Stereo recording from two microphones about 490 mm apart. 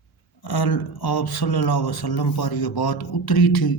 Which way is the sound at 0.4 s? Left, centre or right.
Left.